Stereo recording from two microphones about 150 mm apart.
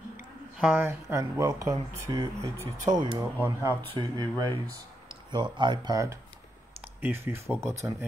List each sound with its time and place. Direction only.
0.6 s speech: 10° right (ahead or behind); by 3.3 s 30° right (ahead or behind)
3.3 s speech: 15° right (ahead or behind)
4.0 s speech: 30° right (ahead or behind)